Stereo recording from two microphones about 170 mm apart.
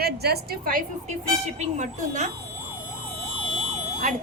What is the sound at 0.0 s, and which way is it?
Speech, 70° right (ahead or behind).